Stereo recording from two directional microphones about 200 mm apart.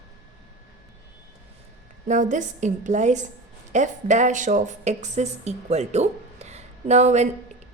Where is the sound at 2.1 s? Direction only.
40° right (ahead or behind).